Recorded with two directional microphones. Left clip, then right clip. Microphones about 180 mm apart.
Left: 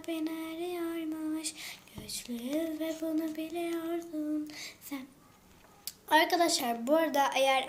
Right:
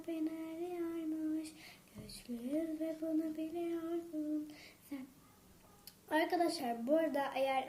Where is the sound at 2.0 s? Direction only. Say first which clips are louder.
Left 12 dB; 45° left (ahead or behind).